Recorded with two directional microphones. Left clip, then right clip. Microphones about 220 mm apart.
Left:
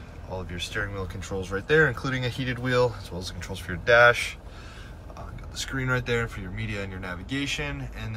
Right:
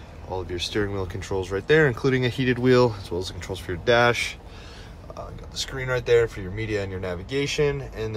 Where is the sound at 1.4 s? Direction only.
40° right (ahead or behind).